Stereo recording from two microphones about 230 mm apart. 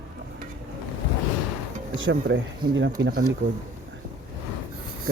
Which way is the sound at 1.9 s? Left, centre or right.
Right.